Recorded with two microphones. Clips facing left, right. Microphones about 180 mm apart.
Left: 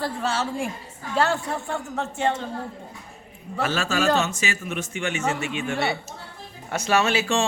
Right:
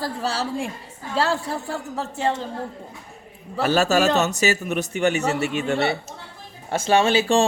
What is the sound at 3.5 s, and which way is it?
A man's voice, 35° right (ahead or behind).